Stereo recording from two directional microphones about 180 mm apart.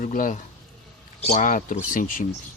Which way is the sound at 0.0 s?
45° left (ahead or behind).